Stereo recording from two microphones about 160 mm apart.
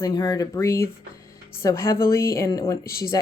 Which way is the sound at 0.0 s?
25° left (ahead or behind).